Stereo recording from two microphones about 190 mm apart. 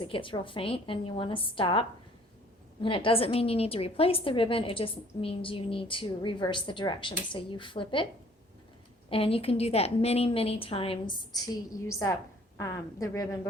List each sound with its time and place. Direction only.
0.0 s a woman's voice: 25° left (ahead or behind)
9.0 s a woman's voice: 30° left (ahead or behind)
11.1 s a woman's voice: 15° left (ahead or behind)